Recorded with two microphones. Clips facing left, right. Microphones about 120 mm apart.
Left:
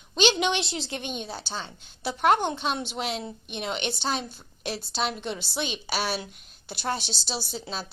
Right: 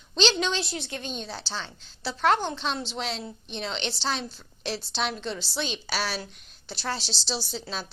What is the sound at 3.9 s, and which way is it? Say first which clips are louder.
Speech: left 1 dB; 50° left (ahead or behind).